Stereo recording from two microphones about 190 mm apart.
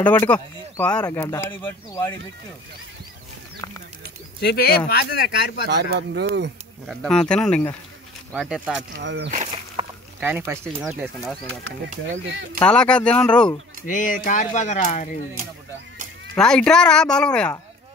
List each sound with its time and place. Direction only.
0.3 s speech: 5° left (ahead or behind)
4.4 s speech: 55° left (ahead or behind)
5.7 s speech: 60° right (ahead or behind)
6.9 s speech: 5° left (ahead or behind)
8.9 s speech: 70° right (ahead or behind)
9.8 s a sound: 25° right (ahead or behind)
10.2 s speech: 10° right (ahead or behind)
12.1 s speech: 70° right (ahead or behind)
12.5 s speech: 5° left (ahead or behind)
13.8 s speech: 45° left (ahead or behind)
16.3 s speech: 5° left (ahead or behind)